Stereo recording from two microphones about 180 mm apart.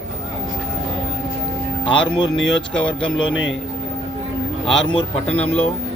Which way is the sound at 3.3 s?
90° left.